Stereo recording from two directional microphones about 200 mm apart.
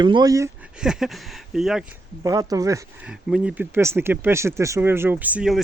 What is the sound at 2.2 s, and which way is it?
Speech, 15° right (ahead or behind).